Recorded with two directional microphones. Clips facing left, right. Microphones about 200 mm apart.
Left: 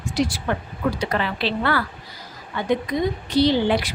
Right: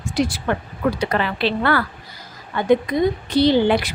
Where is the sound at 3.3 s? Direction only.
55° right (ahead or behind).